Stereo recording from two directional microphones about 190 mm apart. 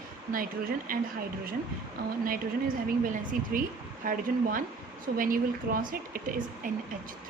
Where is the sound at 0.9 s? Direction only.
45° right (ahead or behind).